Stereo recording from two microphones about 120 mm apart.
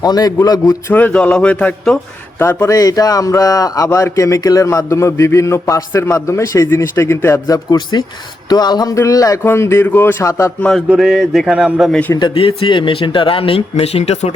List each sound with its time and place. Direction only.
0.0 s a man's voice: 35° left (ahead or behind)
0.9 s a man's voice: 10° left (ahead or behind)
2.4 s speech: 20° left (ahead or behind)
2.7 s speech: 30° left (ahead or behind)
7.4 s a man's voice: 30° left (ahead or behind)
10.6 s speech: 5° left (ahead or behind)
12.3 s speech: 50° left (ahead or behind)